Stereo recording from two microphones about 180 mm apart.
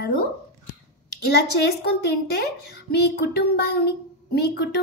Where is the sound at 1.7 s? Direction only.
65° left (ahead or behind).